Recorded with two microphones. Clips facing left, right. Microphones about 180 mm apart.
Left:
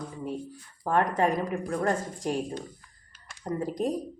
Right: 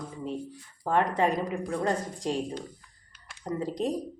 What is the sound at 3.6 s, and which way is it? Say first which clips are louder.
Speech: left 1 dB; 20° right (ahead or behind).